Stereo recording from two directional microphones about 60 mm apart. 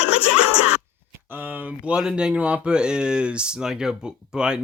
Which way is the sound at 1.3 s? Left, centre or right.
Right.